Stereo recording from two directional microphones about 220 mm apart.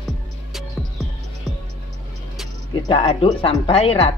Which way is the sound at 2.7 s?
20° left (ahead or behind).